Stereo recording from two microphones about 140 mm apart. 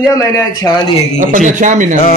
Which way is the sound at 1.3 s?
65° right (ahead or behind).